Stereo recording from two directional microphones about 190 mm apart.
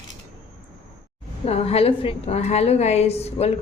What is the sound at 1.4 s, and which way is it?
A woman's voice, 30° left (ahead or behind).